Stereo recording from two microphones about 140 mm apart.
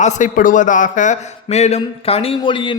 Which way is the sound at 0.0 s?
60° left (ahead or behind).